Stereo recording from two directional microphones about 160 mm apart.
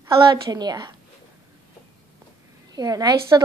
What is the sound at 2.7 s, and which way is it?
Speech, 25° right (ahead or behind).